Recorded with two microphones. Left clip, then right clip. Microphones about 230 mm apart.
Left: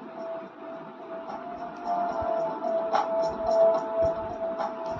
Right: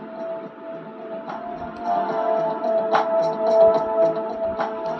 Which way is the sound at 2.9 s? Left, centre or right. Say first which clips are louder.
Right 6 dB; right.